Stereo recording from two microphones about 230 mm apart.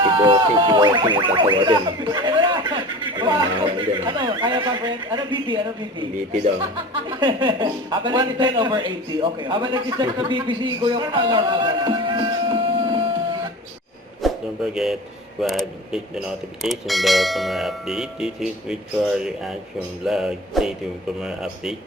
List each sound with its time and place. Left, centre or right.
0.0 s a man's voice: right
7.1 s a man's voice: right
14.2 s a sound: centre
15.4 s speech: centre
20.1 s speech: centre